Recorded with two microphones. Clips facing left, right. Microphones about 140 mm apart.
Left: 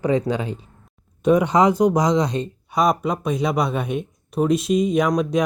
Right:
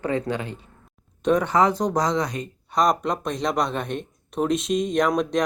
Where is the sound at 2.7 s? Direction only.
5° left (ahead or behind).